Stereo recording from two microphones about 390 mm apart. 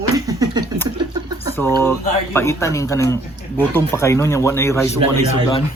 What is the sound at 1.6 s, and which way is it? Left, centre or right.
Speech, centre.